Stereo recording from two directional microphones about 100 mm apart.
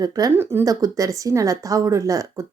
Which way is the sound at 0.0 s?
40° right (ahead or behind).